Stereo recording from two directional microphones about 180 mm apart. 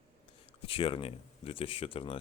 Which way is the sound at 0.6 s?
30° left (ahead or behind).